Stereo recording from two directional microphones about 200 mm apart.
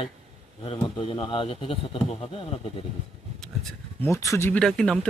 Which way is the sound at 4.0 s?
15° left (ahead or behind).